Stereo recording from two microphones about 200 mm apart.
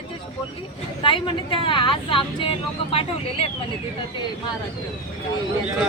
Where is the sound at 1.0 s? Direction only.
25° left (ahead or behind).